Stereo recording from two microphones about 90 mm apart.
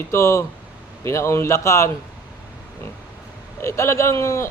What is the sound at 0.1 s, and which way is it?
A man's voice, 30° left (ahead or behind).